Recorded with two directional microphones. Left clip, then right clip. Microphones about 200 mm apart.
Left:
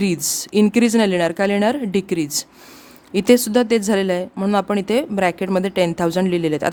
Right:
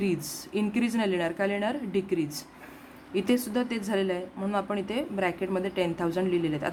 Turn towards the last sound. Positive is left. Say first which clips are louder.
# left 9 dB
turn(degrees=55)  # may be behind; listen again after turning